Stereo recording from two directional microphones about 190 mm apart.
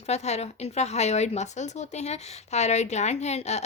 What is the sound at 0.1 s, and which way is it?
A woman's voice, 35° left (ahead or behind).